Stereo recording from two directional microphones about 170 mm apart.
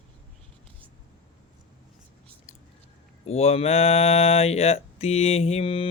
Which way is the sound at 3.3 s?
35° left (ahead or behind).